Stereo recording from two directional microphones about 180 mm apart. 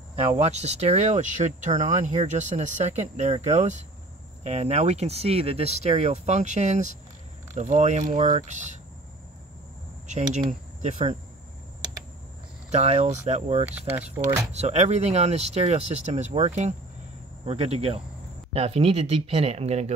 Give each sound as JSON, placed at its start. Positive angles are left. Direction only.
{"t": 0.4, "sound": "speech", "side_deg": -35}
{"t": 10.0, "sound": "speech", "side_deg": -40}
{"t": 12.7, "sound": "speech", "side_deg": -40}
{"t": 13.7, "sound": "speech", "side_deg": -10}
{"t": 14.0, "sound": "speech", "side_deg": -40}